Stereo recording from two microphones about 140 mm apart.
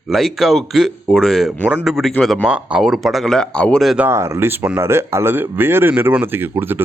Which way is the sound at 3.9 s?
15° right (ahead or behind).